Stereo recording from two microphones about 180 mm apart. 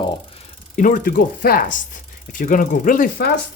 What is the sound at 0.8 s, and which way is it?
Speech, 50° left (ahead or behind).